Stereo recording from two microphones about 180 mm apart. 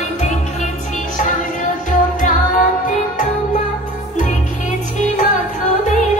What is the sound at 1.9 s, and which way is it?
Music, 45° left (ahead or behind).